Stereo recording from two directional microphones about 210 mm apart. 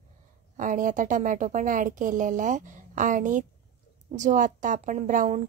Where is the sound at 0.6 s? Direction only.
40° right (ahead or behind).